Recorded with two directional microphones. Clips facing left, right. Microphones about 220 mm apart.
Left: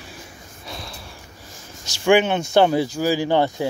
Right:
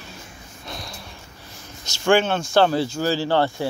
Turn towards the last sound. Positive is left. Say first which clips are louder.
# left 1 dB
turn(degrees=15)  # may be behind; listen again after turning